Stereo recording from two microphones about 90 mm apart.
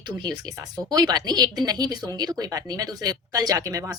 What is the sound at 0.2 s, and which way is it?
Speech, 50° right (ahead or behind).